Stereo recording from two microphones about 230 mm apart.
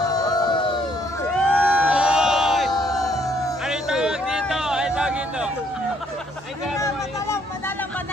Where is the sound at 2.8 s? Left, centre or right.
Centre.